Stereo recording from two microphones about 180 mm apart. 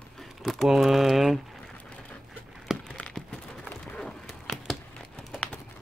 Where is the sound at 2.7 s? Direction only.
5° left (ahead or behind).